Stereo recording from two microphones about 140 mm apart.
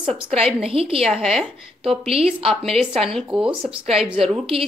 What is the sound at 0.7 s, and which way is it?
Speech, 45° right (ahead or behind).